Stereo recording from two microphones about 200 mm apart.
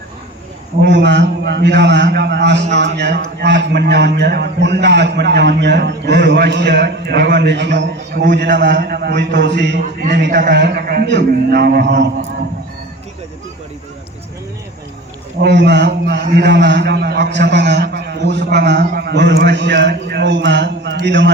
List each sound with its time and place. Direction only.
0.8 s a man's voice: 60° right (ahead or behind)
15.4 s a man's voice: 60° right (ahead or behind)